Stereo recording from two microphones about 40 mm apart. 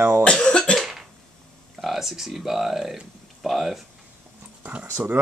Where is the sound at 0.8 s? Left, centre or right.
Centre.